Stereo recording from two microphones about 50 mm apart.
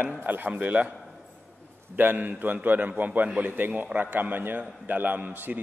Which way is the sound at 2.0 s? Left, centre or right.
Right.